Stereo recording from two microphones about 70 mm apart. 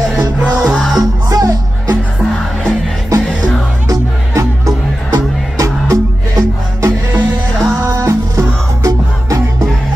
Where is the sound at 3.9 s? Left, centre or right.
Right.